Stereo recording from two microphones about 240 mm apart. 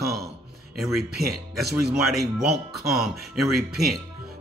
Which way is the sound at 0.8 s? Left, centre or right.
Centre.